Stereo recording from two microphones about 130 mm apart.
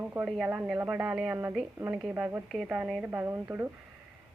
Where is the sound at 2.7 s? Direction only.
5° right (ahead or behind).